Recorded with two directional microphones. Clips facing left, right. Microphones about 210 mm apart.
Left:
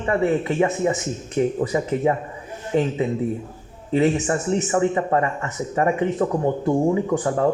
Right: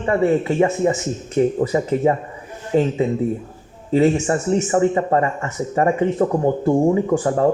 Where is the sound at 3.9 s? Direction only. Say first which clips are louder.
Right 3 dB; 30° right (ahead or behind).